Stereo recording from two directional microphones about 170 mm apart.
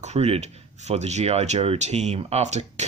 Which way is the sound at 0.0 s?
40° right (ahead or behind).